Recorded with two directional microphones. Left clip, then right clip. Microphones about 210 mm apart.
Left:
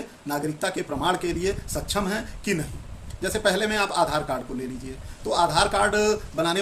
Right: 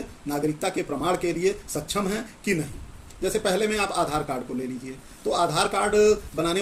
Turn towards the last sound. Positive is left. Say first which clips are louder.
# right 1 dB
turn(degrees=15)  # may be behind; listen again after turning